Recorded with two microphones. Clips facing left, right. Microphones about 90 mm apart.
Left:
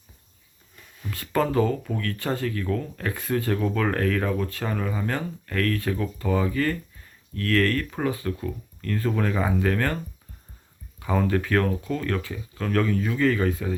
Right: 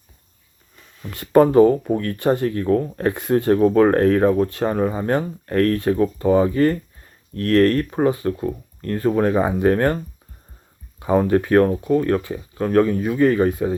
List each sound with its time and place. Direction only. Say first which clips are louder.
1.1 s speech: right 10 dB; 25° right (ahead or behind)
11.0 s speech: right 7 dB; 25° right (ahead or behind)